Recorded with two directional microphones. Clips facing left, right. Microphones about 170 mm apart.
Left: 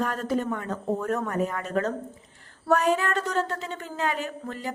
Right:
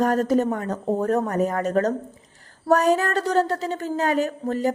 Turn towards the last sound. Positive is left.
turn(degrees=-40)  # may be behind; listen again after turning